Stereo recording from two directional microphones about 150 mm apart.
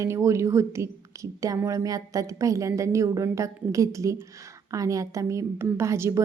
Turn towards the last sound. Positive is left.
turn(degrees=-20)  # may be behind; listen again after turning